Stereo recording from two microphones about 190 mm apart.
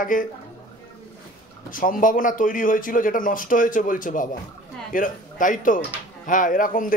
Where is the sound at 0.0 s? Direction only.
45° left (ahead or behind).